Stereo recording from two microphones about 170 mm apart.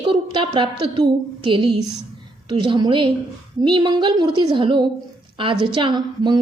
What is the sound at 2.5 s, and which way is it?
A woman's voice, 25° right (ahead or behind).